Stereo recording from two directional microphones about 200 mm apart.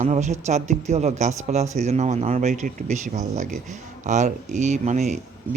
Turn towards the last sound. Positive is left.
turn(degrees=-35)  # may be behind; listen again after turning